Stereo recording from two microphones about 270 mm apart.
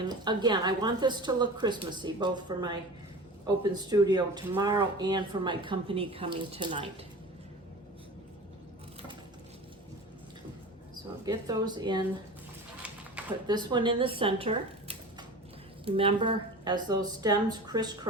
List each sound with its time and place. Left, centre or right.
0.1 s speech: centre
11.3 s speech: centre
13.2 s a sound: centre
13.5 s speech: centre